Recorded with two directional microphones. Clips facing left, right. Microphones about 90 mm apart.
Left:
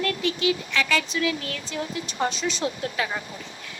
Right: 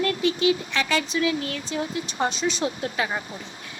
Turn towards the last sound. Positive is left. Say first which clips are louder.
# right 1 dB
turn(degrees=-30)  # may be behind; listen again after turning